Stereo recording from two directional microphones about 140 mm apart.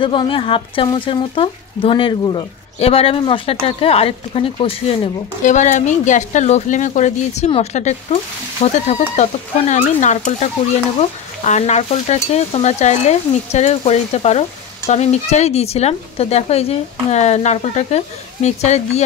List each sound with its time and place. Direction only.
0.0 s speech: 35° left (ahead or behind)
5.4 s speech: 60° left (ahead or behind)